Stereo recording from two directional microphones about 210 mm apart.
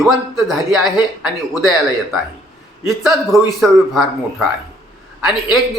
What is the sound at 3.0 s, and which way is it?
Speech, centre (ahead or behind).